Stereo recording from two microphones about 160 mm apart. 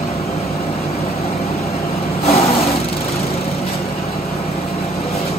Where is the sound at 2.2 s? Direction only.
40° left (ahead or behind).